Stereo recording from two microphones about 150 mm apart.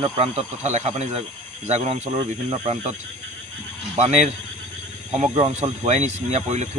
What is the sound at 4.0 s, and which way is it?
Speech, 50° right (ahead or behind).